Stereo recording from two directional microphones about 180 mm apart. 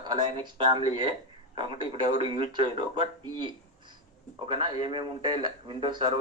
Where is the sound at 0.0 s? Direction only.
25° right (ahead or behind).